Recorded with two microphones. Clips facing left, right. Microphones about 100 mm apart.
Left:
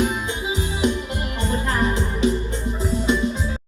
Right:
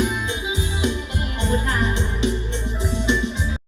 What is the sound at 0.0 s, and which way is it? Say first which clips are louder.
Music: left 1 dB; 35° left (ahead or behind).